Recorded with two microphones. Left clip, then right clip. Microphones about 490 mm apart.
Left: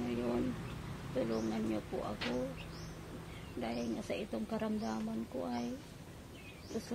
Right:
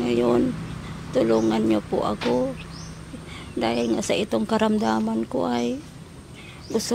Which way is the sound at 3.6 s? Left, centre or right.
Right.